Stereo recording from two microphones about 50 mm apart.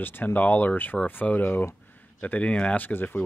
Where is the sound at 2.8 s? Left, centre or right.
Left.